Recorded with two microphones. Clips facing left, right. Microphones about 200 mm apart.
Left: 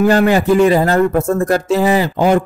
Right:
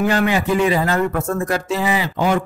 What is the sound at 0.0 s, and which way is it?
Speech, 45° left (ahead or behind).